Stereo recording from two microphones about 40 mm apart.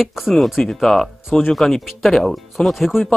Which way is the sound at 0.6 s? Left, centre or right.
Centre.